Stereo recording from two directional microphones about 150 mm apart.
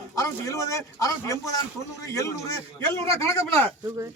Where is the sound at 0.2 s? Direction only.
20° left (ahead or behind).